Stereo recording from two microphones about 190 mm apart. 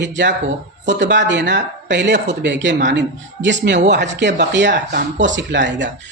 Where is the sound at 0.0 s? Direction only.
70° right (ahead or behind).